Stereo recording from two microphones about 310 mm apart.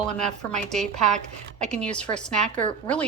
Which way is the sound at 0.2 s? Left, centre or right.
Centre.